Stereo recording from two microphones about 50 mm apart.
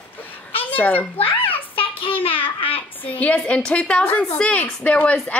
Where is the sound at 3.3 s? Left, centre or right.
Left.